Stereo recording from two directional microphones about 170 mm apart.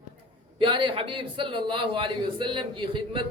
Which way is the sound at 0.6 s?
30° right (ahead or behind).